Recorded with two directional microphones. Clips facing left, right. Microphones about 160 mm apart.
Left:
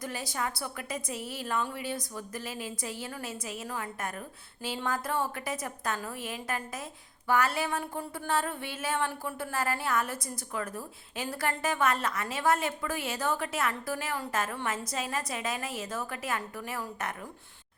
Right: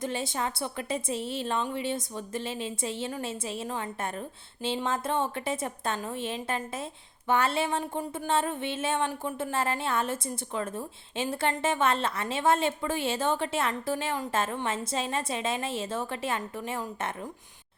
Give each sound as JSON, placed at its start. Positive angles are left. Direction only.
{"t": 0.0, "sound": "speech", "side_deg": -25}